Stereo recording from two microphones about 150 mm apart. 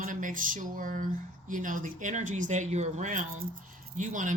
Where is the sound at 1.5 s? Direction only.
60° right (ahead or behind).